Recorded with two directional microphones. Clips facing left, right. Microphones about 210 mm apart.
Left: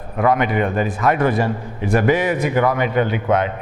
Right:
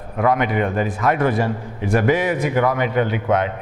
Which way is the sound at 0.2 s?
15° left (ahead or behind).